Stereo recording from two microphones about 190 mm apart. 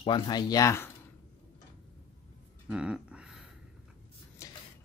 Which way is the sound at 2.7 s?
5° right (ahead or behind).